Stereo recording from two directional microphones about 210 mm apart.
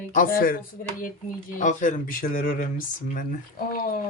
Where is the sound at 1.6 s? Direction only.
35° left (ahead or behind).